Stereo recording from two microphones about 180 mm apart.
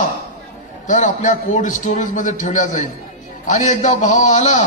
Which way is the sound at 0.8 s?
45° left (ahead or behind).